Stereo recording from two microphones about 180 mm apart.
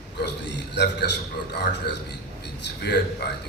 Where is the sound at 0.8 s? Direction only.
70° left (ahead or behind).